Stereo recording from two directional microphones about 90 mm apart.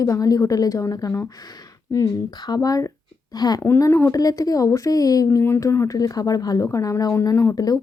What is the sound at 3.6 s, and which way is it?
Speech, 30° left (ahead or behind).